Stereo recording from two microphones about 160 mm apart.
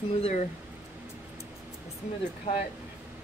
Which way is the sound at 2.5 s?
35° left (ahead or behind).